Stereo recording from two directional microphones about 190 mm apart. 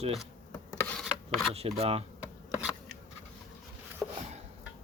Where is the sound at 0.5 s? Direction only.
15° left (ahead or behind).